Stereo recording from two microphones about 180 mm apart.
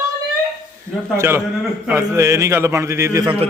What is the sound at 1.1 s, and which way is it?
A man's voice, 15° right (ahead or behind).